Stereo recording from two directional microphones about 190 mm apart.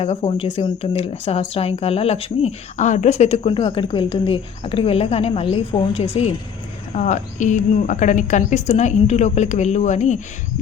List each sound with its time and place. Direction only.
0.0 s speech: 35° left (ahead or behind)